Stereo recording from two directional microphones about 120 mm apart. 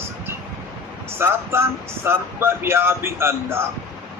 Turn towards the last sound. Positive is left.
turn(degrees=-20)  # may be behind; listen again after turning